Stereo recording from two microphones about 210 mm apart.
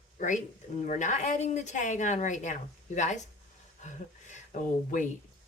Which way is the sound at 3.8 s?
35° left (ahead or behind).